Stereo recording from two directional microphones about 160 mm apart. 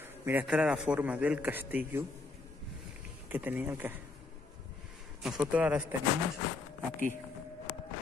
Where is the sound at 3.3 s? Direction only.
10° right (ahead or behind).